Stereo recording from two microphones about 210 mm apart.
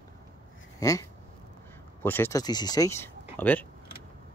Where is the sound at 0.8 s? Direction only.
15° left (ahead or behind).